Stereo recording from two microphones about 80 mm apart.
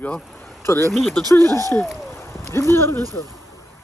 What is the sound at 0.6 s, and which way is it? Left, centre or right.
Speech, left.